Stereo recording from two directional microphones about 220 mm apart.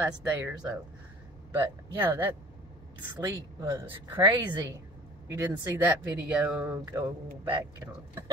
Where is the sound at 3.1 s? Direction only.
20° right (ahead or behind).